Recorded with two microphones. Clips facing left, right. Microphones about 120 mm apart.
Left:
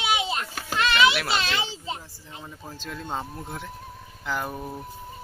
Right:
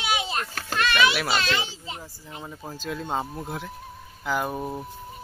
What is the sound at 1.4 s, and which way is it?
A child's voice, 20° left (ahead or behind).